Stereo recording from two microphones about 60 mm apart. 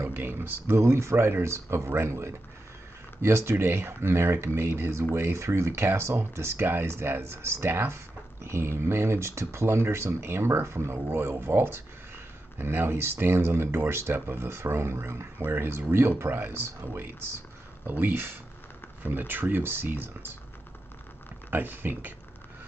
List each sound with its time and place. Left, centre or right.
0.0 s speech: right
21.5 s speech: right